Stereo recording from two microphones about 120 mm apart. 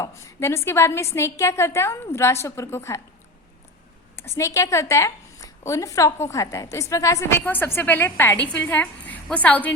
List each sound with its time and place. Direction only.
0.0 s a woman's voice: 25° left (ahead or behind)
4.2 s a woman's voice: 25° left (ahead or behind)